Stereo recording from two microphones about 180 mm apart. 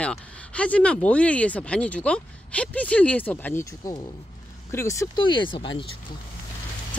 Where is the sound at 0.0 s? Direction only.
5° left (ahead or behind).